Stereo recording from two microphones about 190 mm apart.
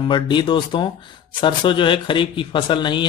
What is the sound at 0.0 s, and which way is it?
Speech, 25° left (ahead or behind).